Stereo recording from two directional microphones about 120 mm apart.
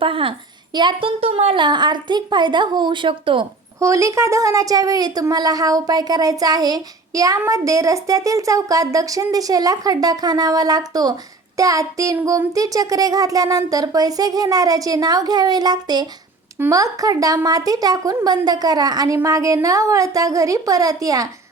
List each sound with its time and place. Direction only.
0.0 s a woman's voice: 45° right (ahead or behind)
1.6 s speech: 40° right (ahead or behind)
3.8 s a woman's voice: 25° right (ahead or behind)